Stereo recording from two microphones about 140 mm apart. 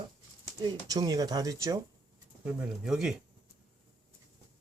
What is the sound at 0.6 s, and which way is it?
Speech, 25° right (ahead or behind).